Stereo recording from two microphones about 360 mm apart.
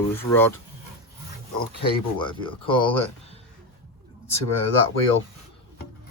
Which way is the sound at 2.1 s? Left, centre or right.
Centre.